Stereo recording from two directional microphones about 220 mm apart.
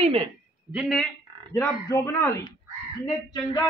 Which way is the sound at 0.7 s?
Centre (ahead or behind).